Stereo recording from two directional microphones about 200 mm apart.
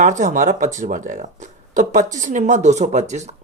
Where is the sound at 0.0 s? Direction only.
40° right (ahead or behind).